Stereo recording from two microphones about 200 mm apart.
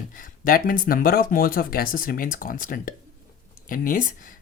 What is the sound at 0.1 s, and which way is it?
Speech, 45° left (ahead or behind).